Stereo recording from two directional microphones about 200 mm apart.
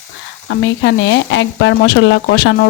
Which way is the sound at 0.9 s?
65° left (ahead or behind).